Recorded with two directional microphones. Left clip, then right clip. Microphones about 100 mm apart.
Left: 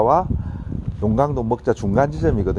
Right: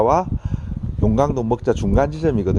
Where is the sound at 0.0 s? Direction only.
15° right (ahead or behind).